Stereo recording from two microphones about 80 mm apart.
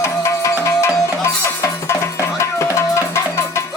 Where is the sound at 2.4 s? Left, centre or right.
Left.